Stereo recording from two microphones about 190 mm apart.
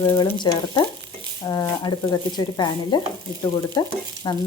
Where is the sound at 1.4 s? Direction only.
20° left (ahead or behind).